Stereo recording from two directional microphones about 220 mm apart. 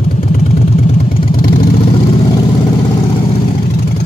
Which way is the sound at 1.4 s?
40° left (ahead or behind).